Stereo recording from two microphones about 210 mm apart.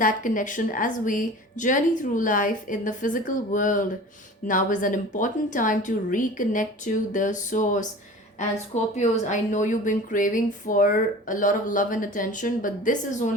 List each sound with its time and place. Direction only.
0.0 s a woman's voice: 40° left (ahead or behind)